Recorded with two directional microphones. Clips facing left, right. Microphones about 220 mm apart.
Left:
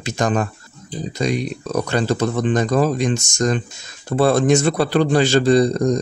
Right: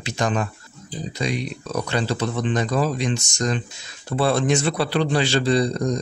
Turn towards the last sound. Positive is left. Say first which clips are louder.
# left 5 dB
turn(degrees=45)  # may be behind; listen again after turning